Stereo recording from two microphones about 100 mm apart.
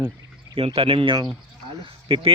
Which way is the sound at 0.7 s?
65° right (ahead or behind).